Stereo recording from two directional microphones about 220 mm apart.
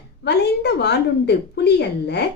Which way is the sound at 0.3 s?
50° left (ahead or behind).